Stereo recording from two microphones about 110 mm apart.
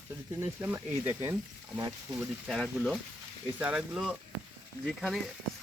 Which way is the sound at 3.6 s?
10° right (ahead or behind).